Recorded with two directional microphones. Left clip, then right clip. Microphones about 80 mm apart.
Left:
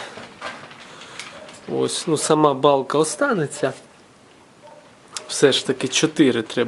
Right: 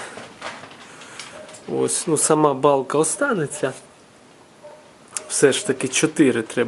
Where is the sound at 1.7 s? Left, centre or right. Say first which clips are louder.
Even; centre.